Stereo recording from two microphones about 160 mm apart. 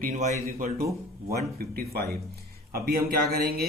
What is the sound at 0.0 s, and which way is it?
Speech, 50° right (ahead or behind).